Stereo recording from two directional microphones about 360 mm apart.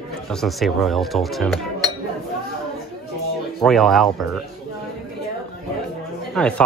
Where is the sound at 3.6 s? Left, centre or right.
Centre.